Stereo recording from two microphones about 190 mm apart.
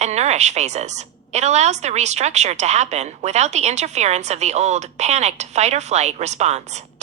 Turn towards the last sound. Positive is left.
turn(degrees=-35)  # may be behind; listen again after turning